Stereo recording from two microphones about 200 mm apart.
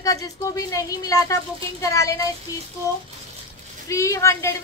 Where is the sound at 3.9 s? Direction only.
15° left (ahead or behind).